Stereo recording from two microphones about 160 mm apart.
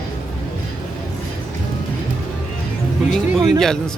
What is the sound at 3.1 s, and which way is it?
Speech, centre (ahead or behind).